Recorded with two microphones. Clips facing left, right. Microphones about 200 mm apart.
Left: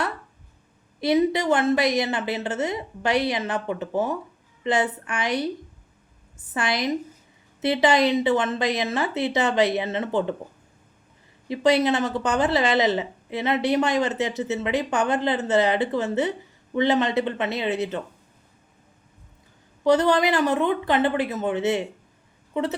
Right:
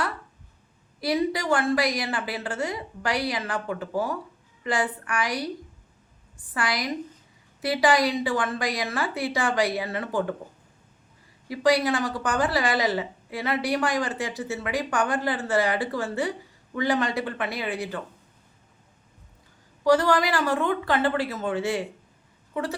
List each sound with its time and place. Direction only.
1.0 s speech: 20° left (ahead or behind)
11.4 s speech: 25° left (ahead or behind)
19.8 s speech: 20° left (ahead or behind)